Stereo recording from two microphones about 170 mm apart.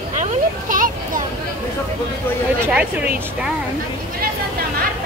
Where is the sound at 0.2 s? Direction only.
50° right (ahead or behind).